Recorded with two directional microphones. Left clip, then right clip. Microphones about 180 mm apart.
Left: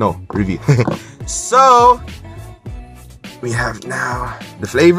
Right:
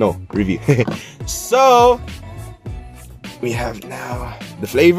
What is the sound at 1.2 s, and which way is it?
Music, 10° right (ahead or behind).